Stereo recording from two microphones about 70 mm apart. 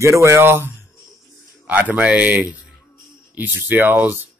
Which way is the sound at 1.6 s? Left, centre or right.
Right.